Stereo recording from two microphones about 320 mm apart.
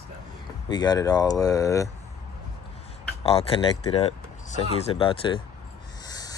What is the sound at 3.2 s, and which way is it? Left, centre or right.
Speech, centre.